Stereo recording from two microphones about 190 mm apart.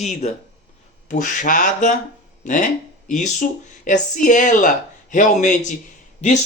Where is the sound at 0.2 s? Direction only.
35° left (ahead or behind).